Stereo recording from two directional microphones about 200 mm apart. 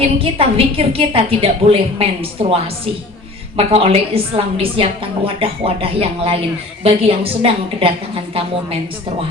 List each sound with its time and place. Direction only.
0.0 s a woman's voice: 30° right (ahead or behind)